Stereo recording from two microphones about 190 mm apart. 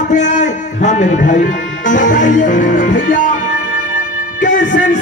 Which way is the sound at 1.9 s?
40° left (ahead or behind).